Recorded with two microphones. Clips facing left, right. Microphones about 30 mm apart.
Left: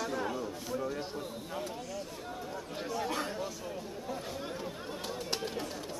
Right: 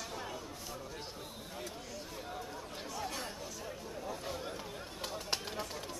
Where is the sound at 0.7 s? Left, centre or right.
Left.